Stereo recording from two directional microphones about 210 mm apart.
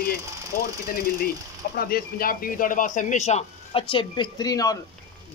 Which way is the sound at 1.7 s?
45° left (ahead or behind).